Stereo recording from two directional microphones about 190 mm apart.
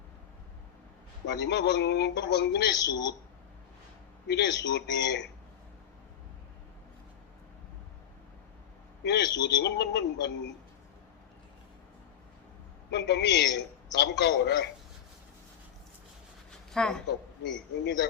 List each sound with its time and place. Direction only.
1.4 s a man's voice: 65° left (ahead or behind)
4.3 s a man's voice: 65° left (ahead or behind)
9.0 s a man's voice: 65° left (ahead or behind)
12.9 s a man's voice: 65° left (ahead or behind)
16.5 s a sound: 5° left (ahead or behind)
17.4 s a man's voice: 65° left (ahead or behind)